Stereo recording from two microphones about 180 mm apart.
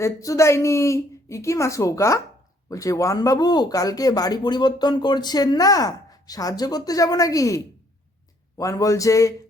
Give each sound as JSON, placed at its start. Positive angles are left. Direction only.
{"t": 0.0, "sound": "speech", "side_deg": 15}